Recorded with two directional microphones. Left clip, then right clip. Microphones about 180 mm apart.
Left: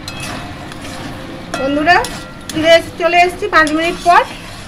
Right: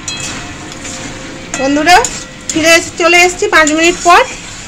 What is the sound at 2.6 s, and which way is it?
Speech, 50° right (ahead or behind).